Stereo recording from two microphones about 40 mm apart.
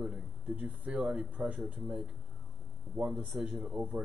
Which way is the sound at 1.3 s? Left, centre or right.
Right.